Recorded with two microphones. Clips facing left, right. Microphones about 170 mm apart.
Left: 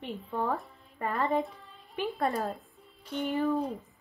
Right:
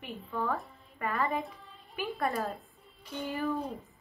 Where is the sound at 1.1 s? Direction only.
30° left (ahead or behind).